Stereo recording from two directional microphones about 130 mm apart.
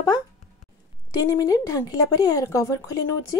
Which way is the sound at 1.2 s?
25° left (ahead or behind).